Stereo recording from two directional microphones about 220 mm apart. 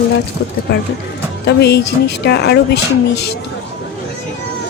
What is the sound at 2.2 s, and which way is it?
Speech, 50° left (ahead or behind).